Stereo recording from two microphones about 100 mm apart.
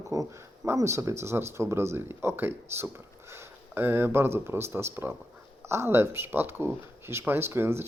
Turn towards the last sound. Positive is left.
turn(degrees=-25)  # may be behind; listen again after turning